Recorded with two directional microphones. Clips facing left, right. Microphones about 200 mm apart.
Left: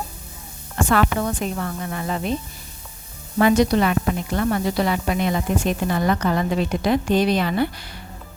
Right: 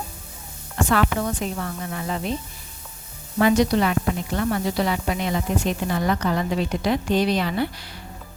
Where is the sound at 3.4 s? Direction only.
50° left (ahead or behind).